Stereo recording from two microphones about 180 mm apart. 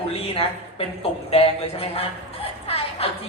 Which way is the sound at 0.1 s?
30° left (ahead or behind).